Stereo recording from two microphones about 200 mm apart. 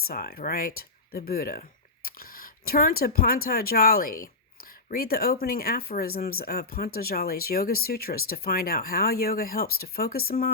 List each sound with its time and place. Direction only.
0.1 s speech: 50° left (ahead or behind)